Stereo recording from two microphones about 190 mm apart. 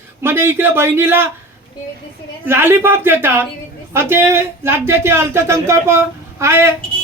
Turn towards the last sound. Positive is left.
turn(degrees=-15)  # may be behind; listen again after turning